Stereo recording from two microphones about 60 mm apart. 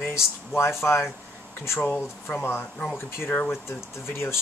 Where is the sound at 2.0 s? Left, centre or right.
Left.